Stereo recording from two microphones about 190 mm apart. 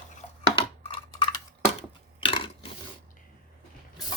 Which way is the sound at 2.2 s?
25° left (ahead or behind).